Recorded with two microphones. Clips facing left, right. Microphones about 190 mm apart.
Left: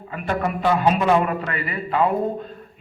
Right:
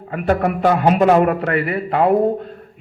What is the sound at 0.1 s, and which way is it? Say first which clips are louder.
A man's voice: right 6 dB; 55° right (ahead or behind).